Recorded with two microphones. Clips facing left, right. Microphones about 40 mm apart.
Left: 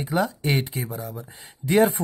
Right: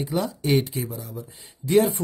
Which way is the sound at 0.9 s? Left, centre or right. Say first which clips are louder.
Left 2 dB; left.